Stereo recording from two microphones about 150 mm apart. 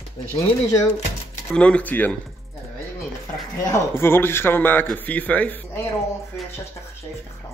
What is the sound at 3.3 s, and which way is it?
Speech, 15° left (ahead or behind).